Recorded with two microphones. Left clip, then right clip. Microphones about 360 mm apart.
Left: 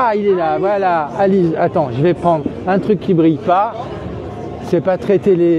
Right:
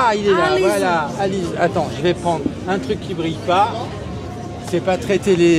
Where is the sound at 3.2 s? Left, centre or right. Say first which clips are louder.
Left 3 dB; left.